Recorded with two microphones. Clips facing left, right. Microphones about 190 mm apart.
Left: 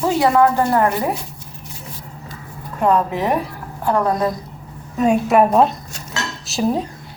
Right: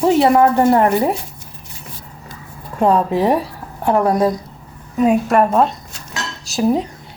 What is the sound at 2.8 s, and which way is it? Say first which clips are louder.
A woman's voice: right 3 dB; 30° right (ahead or behind).